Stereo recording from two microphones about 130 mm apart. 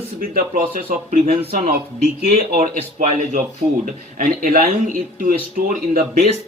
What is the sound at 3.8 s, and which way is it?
Speech, 85° right.